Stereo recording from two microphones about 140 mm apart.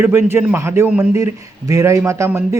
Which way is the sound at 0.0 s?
20° right (ahead or behind).